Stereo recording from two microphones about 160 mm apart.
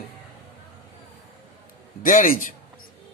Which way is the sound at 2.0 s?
55° left (ahead or behind).